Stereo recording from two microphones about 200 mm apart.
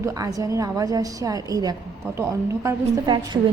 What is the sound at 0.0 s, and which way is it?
A woman's voice, 15° right (ahead or behind).